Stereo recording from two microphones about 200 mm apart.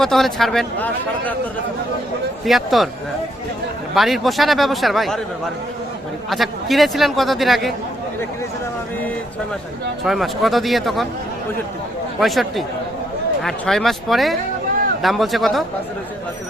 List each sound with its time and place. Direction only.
0.0 s a man's voice: centre (ahead or behind)
2.4 s a man's voice: centre (ahead or behind)
3.9 s a man's voice: centre (ahead or behind)
6.3 s a man's voice: centre (ahead or behind)
10.0 s a man's voice: centre (ahead or behind)
12.2 s a man's voice: centre (ahead or behind)